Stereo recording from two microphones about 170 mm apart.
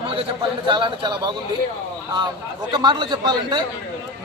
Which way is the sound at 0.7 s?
25° right (ahead or behind).